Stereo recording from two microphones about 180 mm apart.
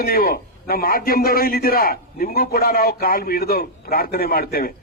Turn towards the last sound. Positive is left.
turn(degrees=55)  # may be behind; listen again after turning